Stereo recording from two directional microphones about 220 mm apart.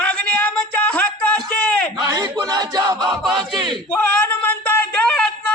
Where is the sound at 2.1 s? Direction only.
15° right (ahead or behind).